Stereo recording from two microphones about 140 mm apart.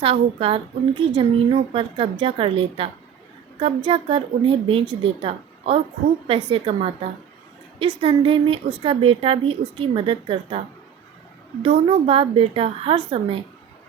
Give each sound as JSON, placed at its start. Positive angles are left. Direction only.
{"t": 0.0, "sound": "a woman's voice", "side_deg": -45}
{"t": 8.0, "sound": "a woman's voice", "side_deg": -40}
{"t": 11.6, "sound": "a woman's voice", "side_deg": -45}